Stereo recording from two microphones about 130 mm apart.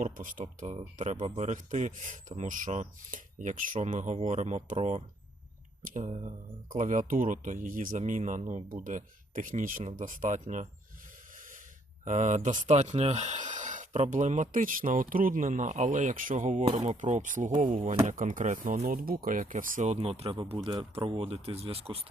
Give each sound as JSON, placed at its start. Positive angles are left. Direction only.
{"t": 0.0, "sound": "speech", "side_deg": -90}
{"t": 0.6, "sound": "speech", "side_deg": -65}
{"t": 7.1, "sound": "speech", "side_deg": -85}
{"t": 12.0, "sound": "speech", "side_deg": -70}